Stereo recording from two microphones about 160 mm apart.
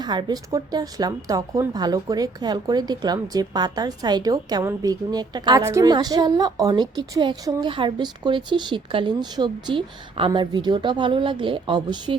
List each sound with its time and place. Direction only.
0.0 s a woman's voice: 25° right (ahead or behind)